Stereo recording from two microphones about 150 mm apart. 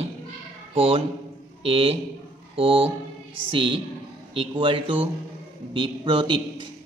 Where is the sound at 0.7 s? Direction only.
40° right (ahead or behind).